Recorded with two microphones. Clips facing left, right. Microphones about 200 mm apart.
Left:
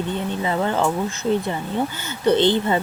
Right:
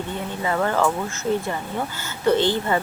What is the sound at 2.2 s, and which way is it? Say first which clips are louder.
Speech: left 2 dB; 20° left (ahead or behind).